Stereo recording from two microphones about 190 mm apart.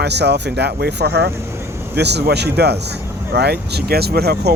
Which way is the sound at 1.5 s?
15° right (ahead or behind).